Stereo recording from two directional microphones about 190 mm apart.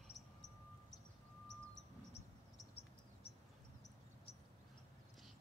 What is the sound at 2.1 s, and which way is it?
Cricket, 35° left (ahead or behind).